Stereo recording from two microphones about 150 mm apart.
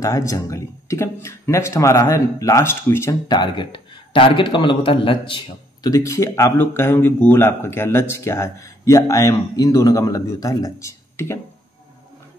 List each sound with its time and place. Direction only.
0.0 s a man's voice: 20° left (ahead or behind)
3.3 s a man's voice: 30° left (ahead or behind)